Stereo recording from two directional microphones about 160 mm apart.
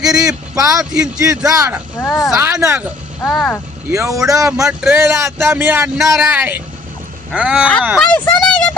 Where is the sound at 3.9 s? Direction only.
20° right (ahead or behind).